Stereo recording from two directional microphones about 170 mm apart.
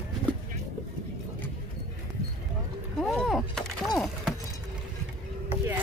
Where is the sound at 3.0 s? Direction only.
Centre (ahead or behind).